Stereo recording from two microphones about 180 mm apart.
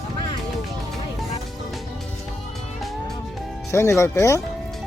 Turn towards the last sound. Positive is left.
turn(degrees=15)  # may be behind; listen again after turning